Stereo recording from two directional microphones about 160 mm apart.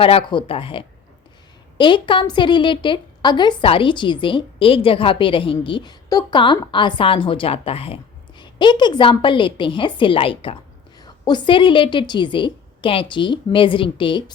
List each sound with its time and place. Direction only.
0.0 s a woman's voice: 35° left (ahead or behind)